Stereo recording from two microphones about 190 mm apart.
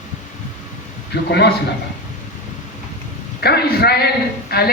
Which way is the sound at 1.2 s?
60° left (ahead or behind).